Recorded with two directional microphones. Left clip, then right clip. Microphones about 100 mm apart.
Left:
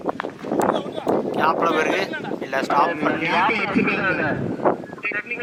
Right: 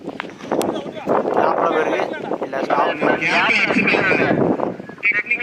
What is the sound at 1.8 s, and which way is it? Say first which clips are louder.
Speech: right 2 dB; 35° left (ahead or behind).